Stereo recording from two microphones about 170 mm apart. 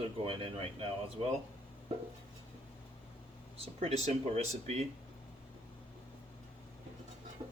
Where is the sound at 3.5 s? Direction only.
35° right (ahead or behind).